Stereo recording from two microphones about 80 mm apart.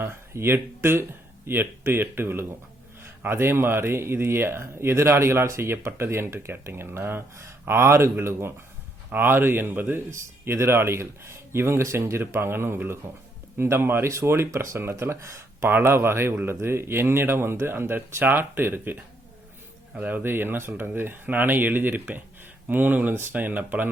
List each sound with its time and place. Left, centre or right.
0.0 s speech: right
20.0 s speech: right